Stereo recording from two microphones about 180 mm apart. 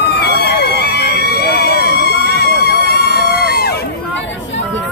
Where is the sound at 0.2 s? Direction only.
65° left (ahead or behind).